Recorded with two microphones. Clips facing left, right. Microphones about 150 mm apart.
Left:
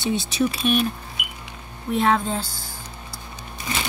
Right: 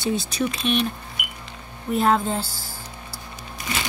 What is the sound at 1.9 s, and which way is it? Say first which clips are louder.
Speech: even; centre (ahead or behind).